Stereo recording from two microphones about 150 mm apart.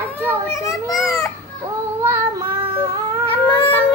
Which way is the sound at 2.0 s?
15° right (ahead or behind).